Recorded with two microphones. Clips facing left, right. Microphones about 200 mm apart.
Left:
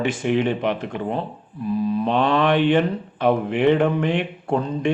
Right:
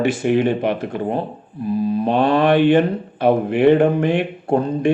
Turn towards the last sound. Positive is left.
turn(degrees=-50)  # may be behind; listen again after turning